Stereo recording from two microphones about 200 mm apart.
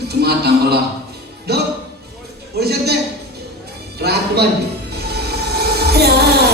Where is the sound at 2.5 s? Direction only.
55° right (ahead or behind).